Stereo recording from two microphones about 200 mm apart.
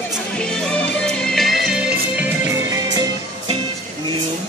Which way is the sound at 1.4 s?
Centre (ahead or behind).